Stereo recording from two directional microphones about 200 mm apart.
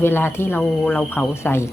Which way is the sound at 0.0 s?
10° left (ahead or behind).